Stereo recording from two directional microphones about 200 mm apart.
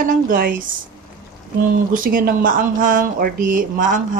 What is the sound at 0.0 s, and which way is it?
Speech, 45° right (ahead or behind).